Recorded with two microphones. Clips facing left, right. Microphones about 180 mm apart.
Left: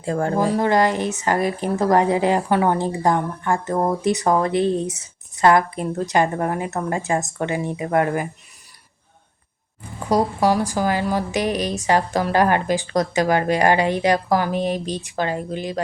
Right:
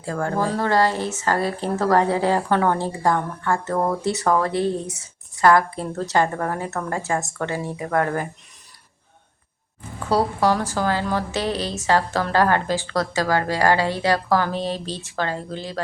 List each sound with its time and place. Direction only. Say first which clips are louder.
0.0 s speech: left 3 dB; 20° left (ahead or behind)
10.0 s speech: left 1 dB; 15° left (ahead or behind)